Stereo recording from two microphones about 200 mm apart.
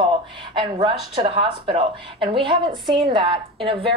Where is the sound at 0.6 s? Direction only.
25° right (ahead or behind).